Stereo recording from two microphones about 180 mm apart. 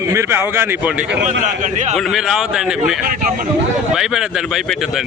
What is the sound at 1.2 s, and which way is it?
Speech, 45° right (ahead or behind).